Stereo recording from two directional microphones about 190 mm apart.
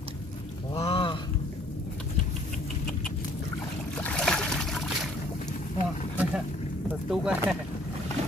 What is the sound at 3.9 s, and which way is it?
Boat, 5° left (ahead or behind).